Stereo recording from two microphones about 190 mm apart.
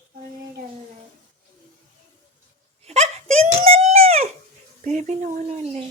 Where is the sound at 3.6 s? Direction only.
30° right (ahead or behind).